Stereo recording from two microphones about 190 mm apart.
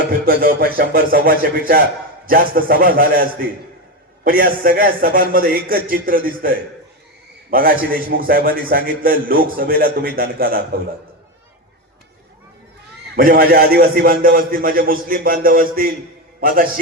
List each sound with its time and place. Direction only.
0.1 s a man's voice: 50° right (ahead or behind)
13.1 s a man's voice: 50° right (ahead or behind)